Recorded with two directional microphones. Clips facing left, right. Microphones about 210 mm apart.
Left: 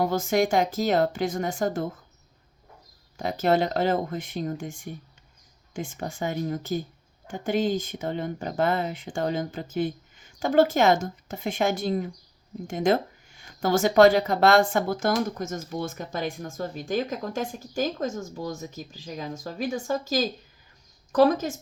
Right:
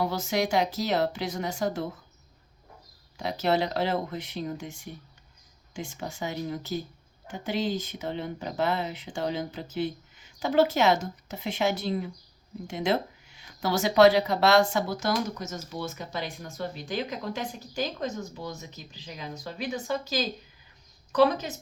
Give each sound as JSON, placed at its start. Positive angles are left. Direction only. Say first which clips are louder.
{"t": 0.0, "sound": "speech", "louder": "left 4 dB", "side_deg": 50}
{"t": 3.2, "sound": "a woman's voice", "louder": "left 3 dB", "side_deg": 50}